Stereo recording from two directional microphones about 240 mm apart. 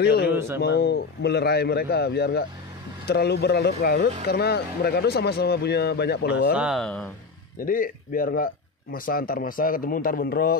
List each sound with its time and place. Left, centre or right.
0.0 s speech: left
0.3 s a sound: centre
0.6 s speech: left
6.5 s speech: centre
7.6 s speech: left